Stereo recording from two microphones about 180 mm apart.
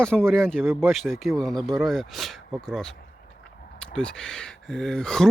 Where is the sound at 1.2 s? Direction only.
Centre (ahead or behind).